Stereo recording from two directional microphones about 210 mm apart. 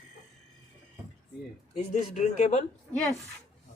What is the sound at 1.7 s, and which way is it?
Speech, 35° left (ahead or behind).